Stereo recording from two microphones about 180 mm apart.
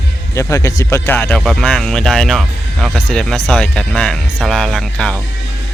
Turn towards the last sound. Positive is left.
turn(degrees=5)  # may be behind; listen again after turning